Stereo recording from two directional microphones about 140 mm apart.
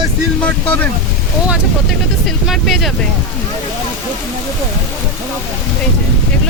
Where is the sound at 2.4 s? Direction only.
Centre (ahead or behind).